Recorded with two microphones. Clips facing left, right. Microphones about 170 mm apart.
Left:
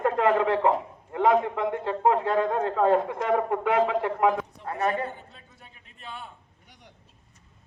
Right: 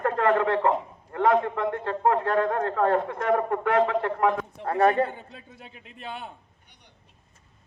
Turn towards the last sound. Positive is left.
turn(degrees=90)